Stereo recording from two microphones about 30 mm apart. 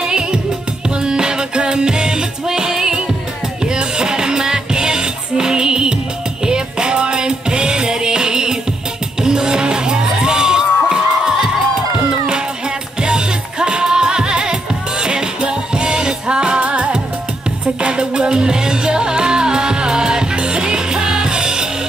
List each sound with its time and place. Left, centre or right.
0.0 s music: right
13.0 s music: right